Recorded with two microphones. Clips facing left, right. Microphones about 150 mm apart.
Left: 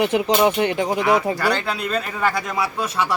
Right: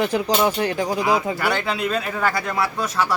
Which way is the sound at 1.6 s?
Centre (ahead or behind).